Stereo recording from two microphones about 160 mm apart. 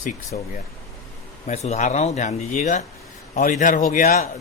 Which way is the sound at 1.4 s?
45° left (ahead or behind).